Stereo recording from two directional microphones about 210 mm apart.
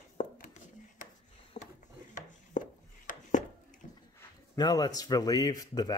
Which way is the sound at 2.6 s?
35° left (ahead or behind).